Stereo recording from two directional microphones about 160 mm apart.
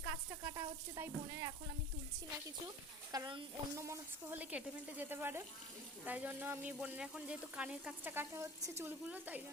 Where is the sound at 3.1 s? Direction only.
30° right (ahead or behind).